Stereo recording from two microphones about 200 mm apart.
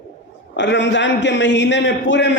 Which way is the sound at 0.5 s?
60° left (ahead or behind).